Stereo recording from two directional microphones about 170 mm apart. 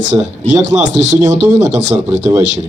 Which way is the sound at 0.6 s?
90° left.